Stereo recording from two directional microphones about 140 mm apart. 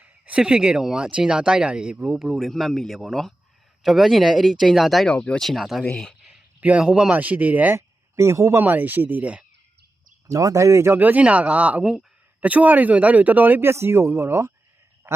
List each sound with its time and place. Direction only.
0.0 s a man's voice: 5° right (ahead or behind)
10.3 s speech: 25° right (ahead or behind)
15.1 s a sound: 15° right (ahead or behind)